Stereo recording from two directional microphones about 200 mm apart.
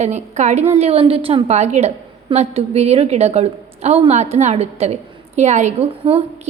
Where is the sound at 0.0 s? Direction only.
35° right (ahead or behind).